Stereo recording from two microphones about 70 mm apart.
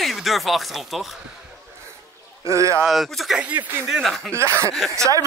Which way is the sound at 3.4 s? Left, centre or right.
Right.